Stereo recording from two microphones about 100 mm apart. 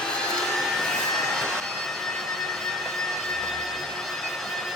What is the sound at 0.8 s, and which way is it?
Jet engine, 5° left (ahead or behind).